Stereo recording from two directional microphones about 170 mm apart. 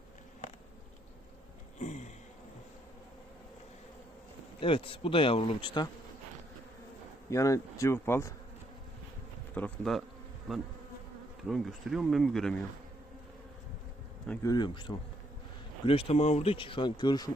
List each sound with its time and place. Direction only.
1.8 s sniff: 45° left (ahead or behind)
4.6 s speech: 30° left (ahead or behind)
7.3 s speech: 20° left (ahead or behind)
9.6 s speech: 5° left (ahead or behind)
14.4 s speech: 25° left (ahead or behind)